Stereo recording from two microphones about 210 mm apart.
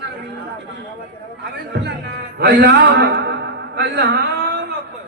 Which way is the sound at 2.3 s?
55° right (ahead or behind).